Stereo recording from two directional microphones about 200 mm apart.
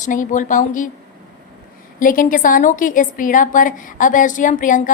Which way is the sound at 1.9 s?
40° left (ahead or behind).